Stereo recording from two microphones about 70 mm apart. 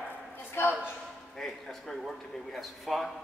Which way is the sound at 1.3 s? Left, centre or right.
Centre.